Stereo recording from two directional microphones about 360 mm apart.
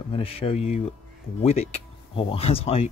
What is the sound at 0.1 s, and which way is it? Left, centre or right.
Speech, centre.